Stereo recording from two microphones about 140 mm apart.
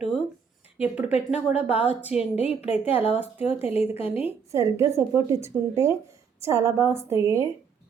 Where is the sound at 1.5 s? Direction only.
45° left (ahead or behind).